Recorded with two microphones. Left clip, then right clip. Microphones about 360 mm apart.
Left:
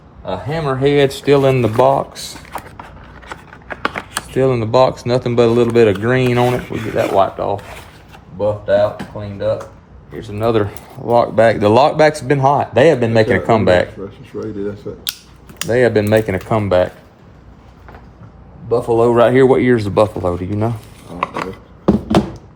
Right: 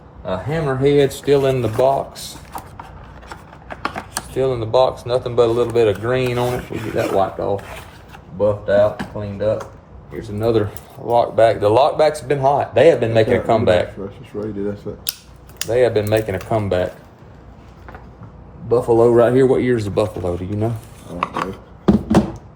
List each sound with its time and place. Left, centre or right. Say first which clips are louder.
0.3 s speech: left 2 dB; centre
1.2 s speech: left 3 dB; left
2.5 s vehicle: left 3 dB; centre
3.2 s a sound: left 5 dB; centre
4.3 s speech: left 4 dB; left
6.6 s speech: left 3 dB; centre
7.2 s speech: left 6 dB; centre
8.4 s speech: left 1 dB; centre
10.3 s speech: left 2 dB; centre
14.9 s speech: left 2 dB; centre
15.7 s speech: left 3 dB; left
18.7 s speech: even; centre
19.3 s speech: left 4 dB; centre
21.2 s a sound: left 1 dB; centre